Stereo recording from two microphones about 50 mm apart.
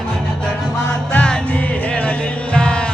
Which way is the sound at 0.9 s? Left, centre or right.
Left.